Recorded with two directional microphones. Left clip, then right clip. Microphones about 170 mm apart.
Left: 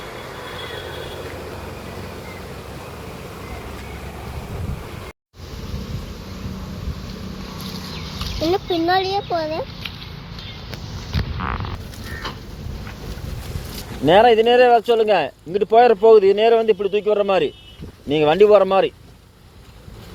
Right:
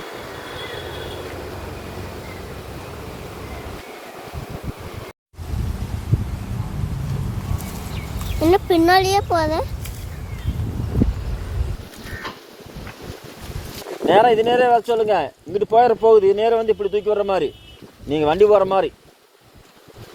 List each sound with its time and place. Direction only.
0.0 s vehicle: centre (ahead or behind)
8.4 s speech: 15° right (ahead or behind)
14.1 s speech: 45° left (ahead or behind)